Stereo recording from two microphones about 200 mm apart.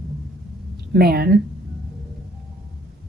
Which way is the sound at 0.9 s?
50° right (ahead or behind).